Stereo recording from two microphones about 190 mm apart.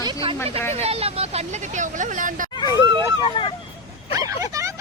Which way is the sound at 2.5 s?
20° left (ahead or behind).